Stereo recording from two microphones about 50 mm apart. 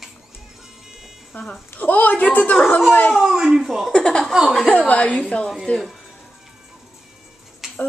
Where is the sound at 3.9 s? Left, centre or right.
Centre.